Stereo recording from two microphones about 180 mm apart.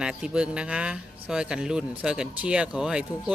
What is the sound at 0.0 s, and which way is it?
Speech, 5° right (ahead or behind).